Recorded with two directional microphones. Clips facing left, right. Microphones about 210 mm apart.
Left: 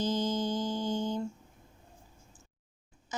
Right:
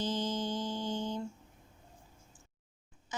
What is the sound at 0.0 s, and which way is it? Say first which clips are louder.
Music: left 4 dB; 45° left (ahead or behind).